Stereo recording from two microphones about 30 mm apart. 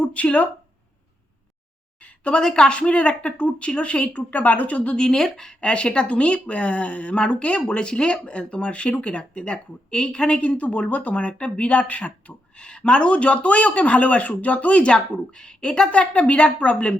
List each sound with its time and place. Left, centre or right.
0.0 s speech: left
2.0 s a sound: left
2.4 s speech: centre
2.6 s speech: left
4.9 s speech: centre
5.5 s speech: left
10.6 s speech: left
14.9 s speech: left
15.9 s speech: left